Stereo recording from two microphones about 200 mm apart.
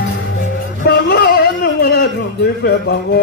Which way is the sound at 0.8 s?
55° left (ahead or behind).